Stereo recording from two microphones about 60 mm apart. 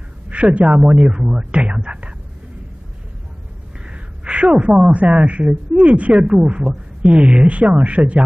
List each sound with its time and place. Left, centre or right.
0.3 s speech: right
3.8 s a woman's voice: centre